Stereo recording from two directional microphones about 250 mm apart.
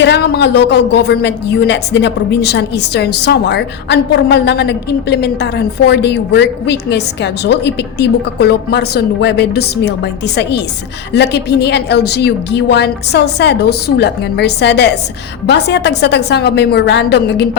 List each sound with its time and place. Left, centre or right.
0.0 s a woman's voice: left